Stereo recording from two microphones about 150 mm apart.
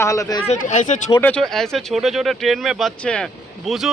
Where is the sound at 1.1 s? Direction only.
10° left (ahead or behind).